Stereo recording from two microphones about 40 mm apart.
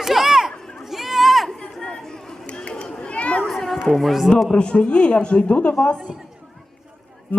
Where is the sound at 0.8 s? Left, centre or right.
Centre.